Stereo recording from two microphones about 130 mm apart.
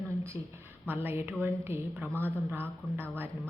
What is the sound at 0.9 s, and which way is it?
A woman's voice, 15° right (ahead or behind).